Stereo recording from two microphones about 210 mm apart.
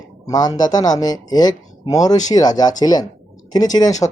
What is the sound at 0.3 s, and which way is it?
Speech, 20° left (ahead or behind).